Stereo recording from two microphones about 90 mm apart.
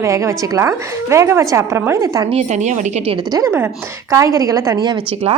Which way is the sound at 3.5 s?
25° right (ahead or behind).